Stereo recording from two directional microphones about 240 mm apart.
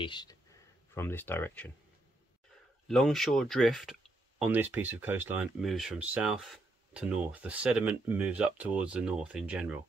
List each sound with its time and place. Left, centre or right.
0.0 s speech: centre
2.9 s speech: centre